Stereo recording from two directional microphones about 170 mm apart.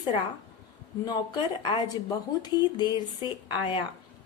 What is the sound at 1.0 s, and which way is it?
Speech, 25° left (ahead or behind).